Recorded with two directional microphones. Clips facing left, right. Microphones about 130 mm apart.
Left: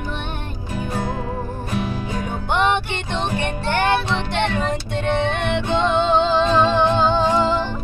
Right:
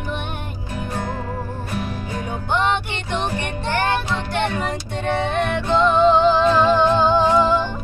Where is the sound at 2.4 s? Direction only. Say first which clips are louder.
Left 1 dB; 20° left (ahead or behind).